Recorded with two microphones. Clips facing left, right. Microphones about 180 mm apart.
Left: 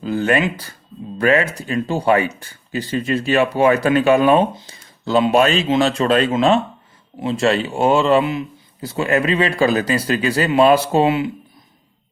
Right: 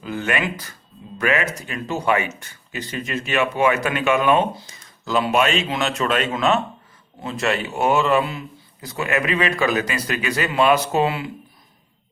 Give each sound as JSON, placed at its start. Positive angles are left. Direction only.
{"t": 0.0, "sound": "speech", "side_deg": 35}
{"t": 8.9, "sound": "speech", "side_deg": 30}